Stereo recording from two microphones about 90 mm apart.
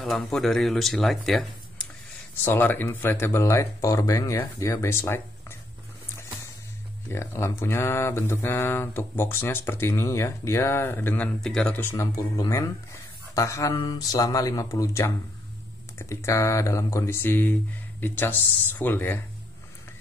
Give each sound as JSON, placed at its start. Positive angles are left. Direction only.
{"t": 0.0, "sound": "speech", "side_deg": 5}
{"t": 2.4, "sound": "speech", "side_deg": 20}
{"t": 7.1, "sound": "speech", "side_deg": 30}
{"t": 11.4, "sound": "speech", "side_deg": 10}
{"t": 11.7, "sound": "speech", "side_deg": 25}
{"t": 12.4, "sound": "speech", "side_deg": 40}